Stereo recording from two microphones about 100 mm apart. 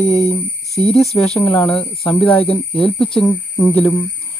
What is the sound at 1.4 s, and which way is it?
Speech, 15° left (ahead or behind).